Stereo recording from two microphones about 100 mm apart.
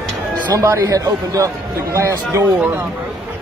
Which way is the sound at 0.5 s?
35° right (ahead or behind).